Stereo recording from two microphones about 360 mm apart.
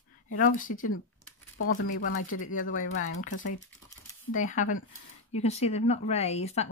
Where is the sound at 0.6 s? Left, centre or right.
Left.